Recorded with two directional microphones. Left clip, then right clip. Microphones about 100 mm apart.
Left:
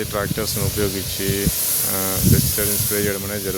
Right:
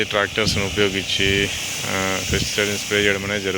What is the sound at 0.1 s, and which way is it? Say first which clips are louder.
Speech: right 4 dB; 15° left (ahead or behind).